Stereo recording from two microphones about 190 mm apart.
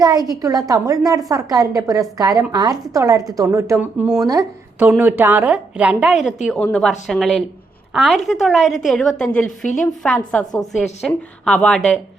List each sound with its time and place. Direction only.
0.0 s a woman's voice: 20° right (ahead or behind); by 4.3 s 5° right (ahead or behind)
4.3 s a woman's voice: 15° right (ahead or behind); by 11.8 s 5° left (ahead or behind)